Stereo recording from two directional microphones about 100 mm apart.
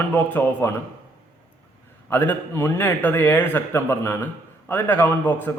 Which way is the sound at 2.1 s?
20° left (ahead or behind).